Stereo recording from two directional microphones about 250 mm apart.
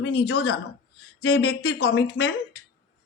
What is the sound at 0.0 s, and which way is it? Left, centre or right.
Speech, left.